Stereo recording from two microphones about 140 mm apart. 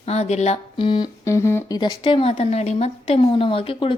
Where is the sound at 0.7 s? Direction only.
35° left (ahead or behind).